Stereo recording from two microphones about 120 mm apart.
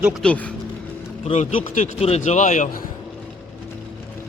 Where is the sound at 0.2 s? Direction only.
10° left (ahead or behind).